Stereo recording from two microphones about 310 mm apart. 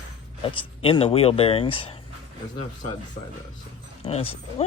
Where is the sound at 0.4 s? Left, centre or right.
Centre.